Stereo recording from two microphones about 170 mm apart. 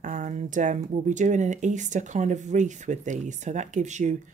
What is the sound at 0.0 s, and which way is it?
Speech, 50° right (ahead or behind).